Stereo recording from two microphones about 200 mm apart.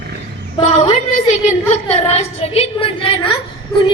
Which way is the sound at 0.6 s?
35° left (ahead or behind).